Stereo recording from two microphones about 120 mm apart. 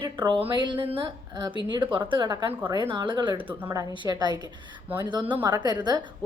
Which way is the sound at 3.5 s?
15° right (ahead or behind).